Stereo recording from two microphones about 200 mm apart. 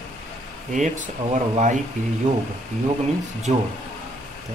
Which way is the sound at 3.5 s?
35° right (ahead or behind).